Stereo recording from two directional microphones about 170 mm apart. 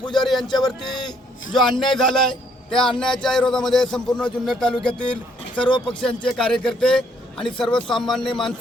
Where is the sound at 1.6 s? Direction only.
25° left (ahead or behind).